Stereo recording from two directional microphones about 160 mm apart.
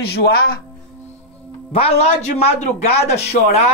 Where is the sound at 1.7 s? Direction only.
40° left (ahead or behind).